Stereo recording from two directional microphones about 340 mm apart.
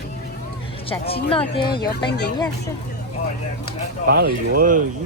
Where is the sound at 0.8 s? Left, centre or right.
Centre.